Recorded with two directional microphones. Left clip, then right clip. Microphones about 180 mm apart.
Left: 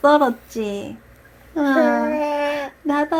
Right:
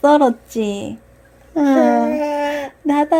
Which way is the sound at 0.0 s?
70° right (ahead or behind).